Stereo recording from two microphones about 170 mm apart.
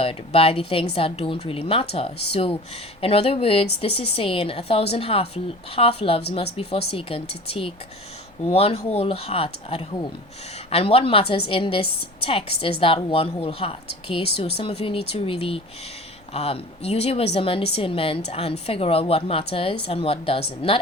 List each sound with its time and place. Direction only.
0.0 s a woman's voice: 35° left (ahead or behind)